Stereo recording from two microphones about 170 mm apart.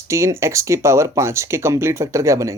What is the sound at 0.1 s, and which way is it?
Speech, 15° right (ahead or behind).